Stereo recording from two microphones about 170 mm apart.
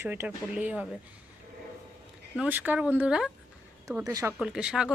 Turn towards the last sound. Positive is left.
turn(degrees=-5)  # may be behind; listen again after turning